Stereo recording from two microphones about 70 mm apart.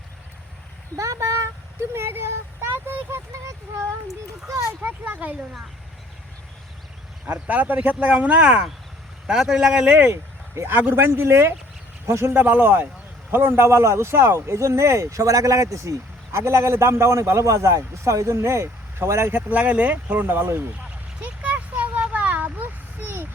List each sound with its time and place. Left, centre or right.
0.9 s speech: right
4.1 s speech: right
4.8 s speech: right
7.3 s speech: right
10.1 s speech: right
12.3 s speech: right
19.4 s speech: right
21.2 s a sound: centre